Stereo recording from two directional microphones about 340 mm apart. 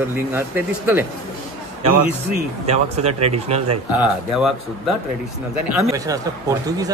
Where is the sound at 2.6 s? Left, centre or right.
Centre.